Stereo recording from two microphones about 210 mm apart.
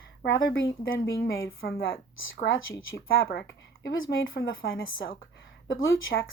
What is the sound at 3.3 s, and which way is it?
Speech, 55° left (ahead or behind).